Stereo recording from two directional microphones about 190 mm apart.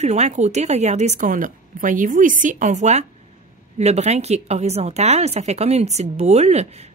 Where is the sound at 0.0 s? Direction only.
35° right (ahead or behind).